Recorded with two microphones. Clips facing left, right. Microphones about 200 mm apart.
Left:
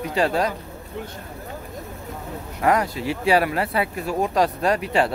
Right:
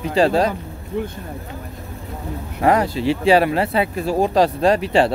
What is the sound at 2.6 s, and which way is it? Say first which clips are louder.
Speech: right 4 dB; 30° right (ahead or behind).